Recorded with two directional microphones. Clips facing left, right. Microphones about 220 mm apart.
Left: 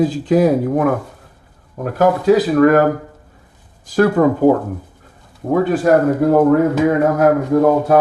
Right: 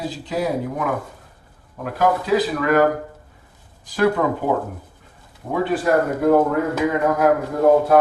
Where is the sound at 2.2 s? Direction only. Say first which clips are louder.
Left 8 dB; 45° left (ahead or behind).